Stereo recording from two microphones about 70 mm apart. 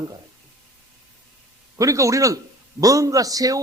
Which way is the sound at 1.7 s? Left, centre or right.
Right.